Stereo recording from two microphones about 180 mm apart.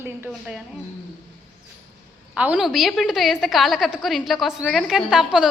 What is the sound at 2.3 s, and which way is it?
A woman's voice, 5° right (ahead or behind).